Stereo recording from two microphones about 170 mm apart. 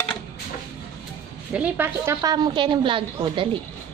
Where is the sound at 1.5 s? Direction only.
10° right (ahead or behind); by 3.6 s 30° right (ahead or behind).